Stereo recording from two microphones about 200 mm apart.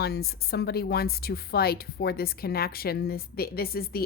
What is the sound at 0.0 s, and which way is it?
A woman's voice, 50° left (ahead or behind).